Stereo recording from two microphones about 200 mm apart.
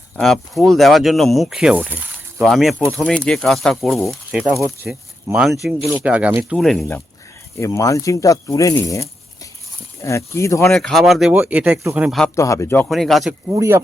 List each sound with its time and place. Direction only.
0.2 s speech: centre (ahead or behind)
4.5 s speech: 15° right (ahead or behind)
7.6 s speech: 15° left (ahead or behind)
10.7 s speech: centre (ahead or behind)
12.4 s speech: 15° left (ahead or behind)
13.5 s speech: 15° right (ahead or behind)